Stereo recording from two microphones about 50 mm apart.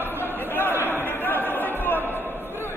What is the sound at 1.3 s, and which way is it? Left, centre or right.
Chatter, left.